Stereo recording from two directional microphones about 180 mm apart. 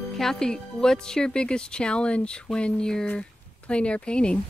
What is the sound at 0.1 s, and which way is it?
Speech, centre (ahead or behind).